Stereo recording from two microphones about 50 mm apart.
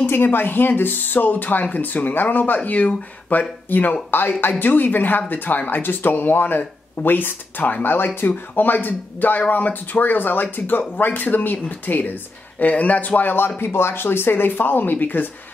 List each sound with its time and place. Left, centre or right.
0.0 s speech: left
13.6 s speech: left